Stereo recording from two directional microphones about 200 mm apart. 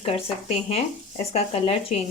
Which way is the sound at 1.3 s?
30° left (ahead or behind).